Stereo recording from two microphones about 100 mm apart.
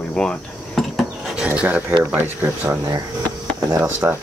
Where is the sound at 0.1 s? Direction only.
5° left (ahead or behind).